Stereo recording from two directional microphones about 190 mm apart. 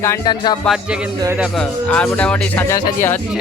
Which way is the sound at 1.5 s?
5° left (ahead or behind).